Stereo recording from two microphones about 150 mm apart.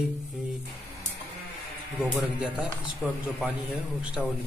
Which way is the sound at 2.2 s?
5° right (ahead or behind).